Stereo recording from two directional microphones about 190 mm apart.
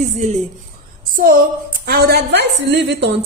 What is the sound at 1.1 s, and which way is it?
A woman's voice, 45° right (ahead or behind).